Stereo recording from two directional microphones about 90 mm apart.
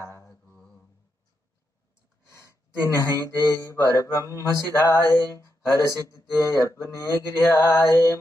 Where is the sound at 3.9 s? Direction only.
35° left (ahead or behind).